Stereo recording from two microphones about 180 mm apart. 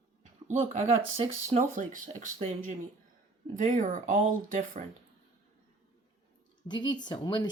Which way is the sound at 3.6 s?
45° right (ahead or behind).